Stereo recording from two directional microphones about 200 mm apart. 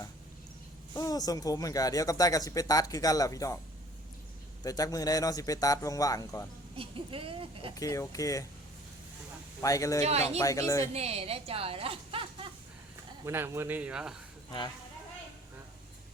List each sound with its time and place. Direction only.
0.9 s speech: 20° left (ahead or behind)
4.6 s speech: 20° left (ahead or behind)
6.7 s speech: 25° right (ahead or behind)
7.8 s speech: 15° left (ahead or behind)
9.6 s speech: 15° left (ahead or behind)
10.0 s speech: 30° right (ahead or behind)
10.4 s speech: 15° left (ahead or behind)
10.9 s a woman's voice: 30° right (ahead or behind)
13.2 s a man's voice: 10° right (ahead or behind)